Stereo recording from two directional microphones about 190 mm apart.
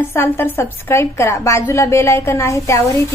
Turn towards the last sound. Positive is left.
turn(degrees=15)  # may be behind; listen again after turning